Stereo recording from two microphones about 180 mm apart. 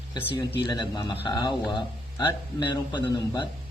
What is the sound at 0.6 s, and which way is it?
Speech, 25° left (ahead or behind).